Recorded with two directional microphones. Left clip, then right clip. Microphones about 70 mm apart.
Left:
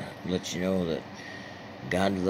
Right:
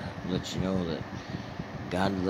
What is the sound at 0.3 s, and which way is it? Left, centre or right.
Speech, left.